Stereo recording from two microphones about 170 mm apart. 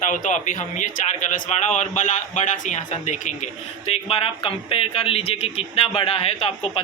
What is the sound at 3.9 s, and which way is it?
Speech, 35° left (ahead or behind).